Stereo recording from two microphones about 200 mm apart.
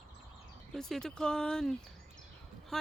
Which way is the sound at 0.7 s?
5° left (ahead or behind).